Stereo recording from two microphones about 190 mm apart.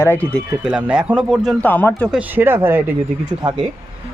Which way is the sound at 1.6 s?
10° left (ahead or behind).